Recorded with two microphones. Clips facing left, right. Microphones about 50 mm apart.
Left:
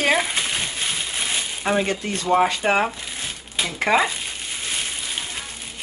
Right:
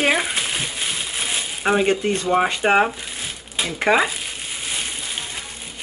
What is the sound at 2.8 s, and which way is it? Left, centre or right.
Crumpling, centre.